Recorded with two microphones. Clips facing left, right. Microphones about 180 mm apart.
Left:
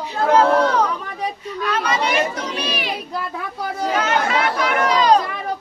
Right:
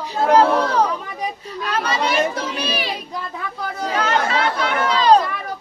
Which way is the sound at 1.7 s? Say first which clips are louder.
Even; 35° right (ahead or behind).